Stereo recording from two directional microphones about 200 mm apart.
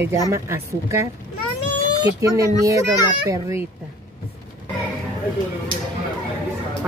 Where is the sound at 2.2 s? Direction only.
15° right (ahead or behind).